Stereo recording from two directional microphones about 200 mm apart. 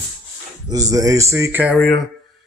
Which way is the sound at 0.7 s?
15° right (ahead or behind).